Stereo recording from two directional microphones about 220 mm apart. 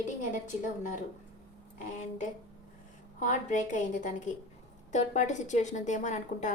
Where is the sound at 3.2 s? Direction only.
35° left (ahead or behind).